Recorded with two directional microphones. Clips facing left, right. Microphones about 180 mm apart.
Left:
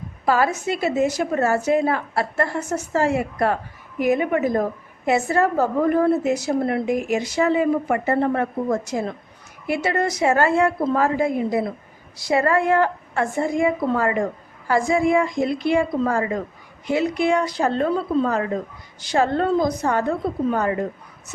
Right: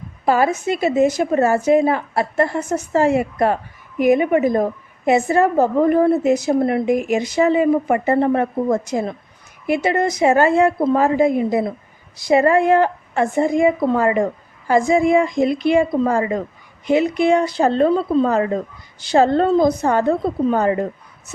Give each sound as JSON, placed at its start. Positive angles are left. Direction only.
{"t": 0.3, "sound": "a woman's voice", "side_deg": -20}